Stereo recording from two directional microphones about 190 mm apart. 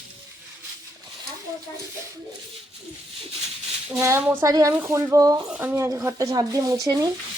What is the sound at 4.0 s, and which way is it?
Speech, 15° right (ahead or behind).